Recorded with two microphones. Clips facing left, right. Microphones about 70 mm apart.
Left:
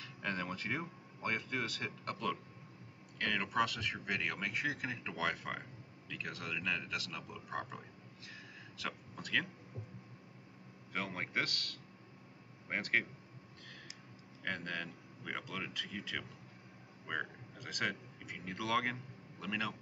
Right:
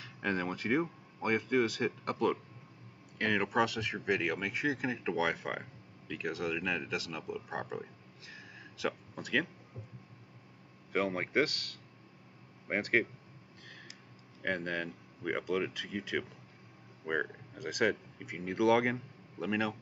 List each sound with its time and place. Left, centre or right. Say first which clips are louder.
0.0 s a sound: right 6 dB; right
0.6 s speech: right 9 dB; centre
3.4 s speech: right 4 dB; centre
8.3 s a sound: right 3 dB; centre
10.9 s speech: right 8 dB; centre
14.4 s speech: right 6 dB; centre
17.0 s speech: right 6 dB; right
17.6 s speech: right 8 dB; centre